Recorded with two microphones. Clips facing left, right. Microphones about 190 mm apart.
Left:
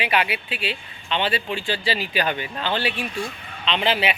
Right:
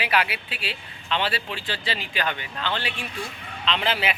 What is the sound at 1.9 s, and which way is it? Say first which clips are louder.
Speech: left 5 dB; 15° left (ahead or behind).